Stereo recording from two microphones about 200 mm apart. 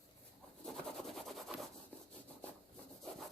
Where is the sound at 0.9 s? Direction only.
Centre (ahead or behind).